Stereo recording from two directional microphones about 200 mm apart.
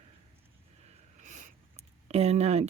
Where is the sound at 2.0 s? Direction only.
30° right (ahead or behind).